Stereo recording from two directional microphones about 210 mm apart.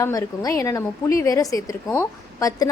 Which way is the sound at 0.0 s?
15° left (ahead or behind).